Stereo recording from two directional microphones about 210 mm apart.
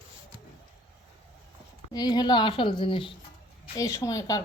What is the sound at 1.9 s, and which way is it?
A woman's voice, 20° left (ahead or behind).